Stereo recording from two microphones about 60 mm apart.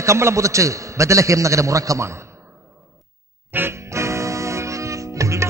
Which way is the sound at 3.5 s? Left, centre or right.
Right.